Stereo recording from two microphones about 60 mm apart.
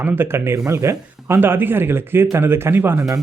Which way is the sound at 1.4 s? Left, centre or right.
Right.